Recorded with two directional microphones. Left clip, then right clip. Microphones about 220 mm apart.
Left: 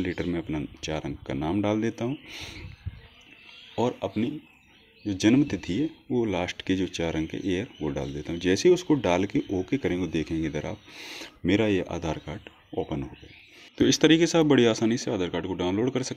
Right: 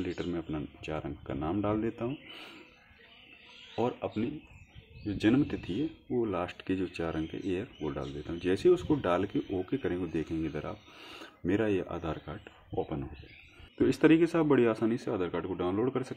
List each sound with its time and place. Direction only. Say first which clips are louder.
0.0 s speech: left 5 dB; 35° left (ahead or behind)
2.0 s speech: left 5 dB; 25° left (ahead or behind)
3.7 s speech: left 5 dB; 25° left (ahead or behind)